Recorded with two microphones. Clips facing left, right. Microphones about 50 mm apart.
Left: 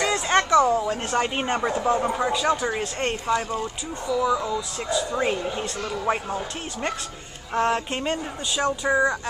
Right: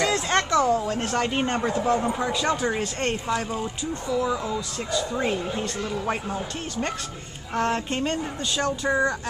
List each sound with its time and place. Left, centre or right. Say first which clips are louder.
0.0 s speech: left 1 dB; centre
4.1 s speech: left 3 dB; centre
7.5 s speech: left 2 dB; centre